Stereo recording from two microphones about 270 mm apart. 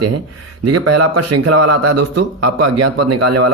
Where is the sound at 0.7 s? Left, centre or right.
Right.